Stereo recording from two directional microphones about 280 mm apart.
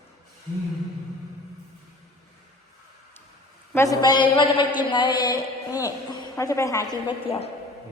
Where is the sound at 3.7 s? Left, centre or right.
Centre.